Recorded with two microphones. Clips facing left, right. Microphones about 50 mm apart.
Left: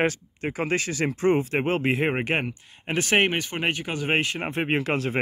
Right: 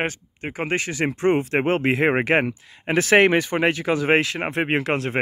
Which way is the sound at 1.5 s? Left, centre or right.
Right.